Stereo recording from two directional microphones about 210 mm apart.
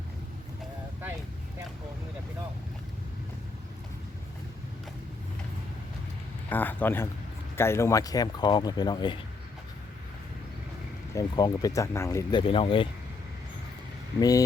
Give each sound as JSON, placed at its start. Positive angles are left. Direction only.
{"t": 6.5, "sound": "speech", "side_deg": 10}
{"t": 11.1, "sound": "speech", "side_deg": 20}
{"t": 14.2, "sound": "speech", "side_deg": 15}